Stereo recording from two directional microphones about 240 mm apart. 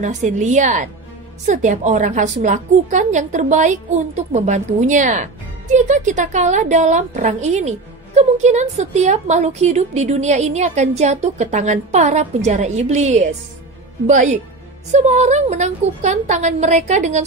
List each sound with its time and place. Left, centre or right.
0.0 s a woman's voice: right